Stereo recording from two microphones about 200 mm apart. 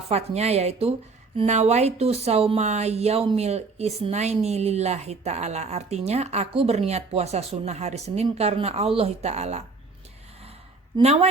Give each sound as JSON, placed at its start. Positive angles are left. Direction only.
{"t": 0.1, "sound": "speech", "side_deg": -30}
{"t": 10.9, "sound": "speech", "side_deg": -30}